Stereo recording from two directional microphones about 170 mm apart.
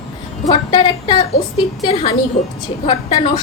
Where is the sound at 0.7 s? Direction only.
25° left (ahead or behind).